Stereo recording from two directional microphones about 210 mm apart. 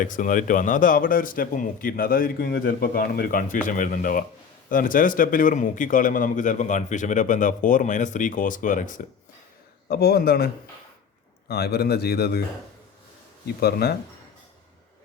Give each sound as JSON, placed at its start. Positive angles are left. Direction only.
{"t": 0.0, "sound": "a man's voice", "side_deg": 40}
{"t": 13.6, "sound": "a man's voice", "side_deg": 50}